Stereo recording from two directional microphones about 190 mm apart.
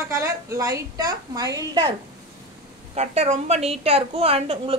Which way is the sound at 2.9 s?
35° right (ahead or behind).